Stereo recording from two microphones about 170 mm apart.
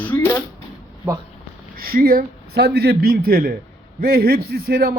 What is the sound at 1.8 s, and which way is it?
A man's voice, 60° right (ahead or behind).